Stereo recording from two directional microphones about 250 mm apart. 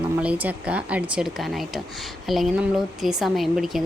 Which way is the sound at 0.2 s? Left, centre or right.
Centre.